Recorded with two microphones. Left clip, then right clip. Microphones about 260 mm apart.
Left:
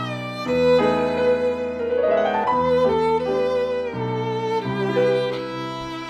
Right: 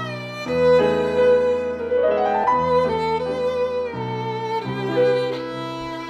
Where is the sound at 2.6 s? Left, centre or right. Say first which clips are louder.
Left 1 dB; centre.